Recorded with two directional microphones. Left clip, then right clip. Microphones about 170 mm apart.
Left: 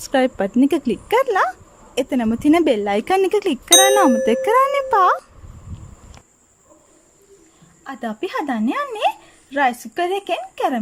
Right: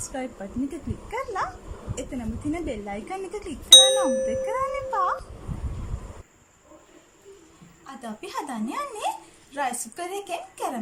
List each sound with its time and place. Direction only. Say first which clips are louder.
0.1 s speech: left 19 dB; 65° left (ahead or behind)
7.9 s a woman's voice: left 11 dB; 50° left (ahead or behind)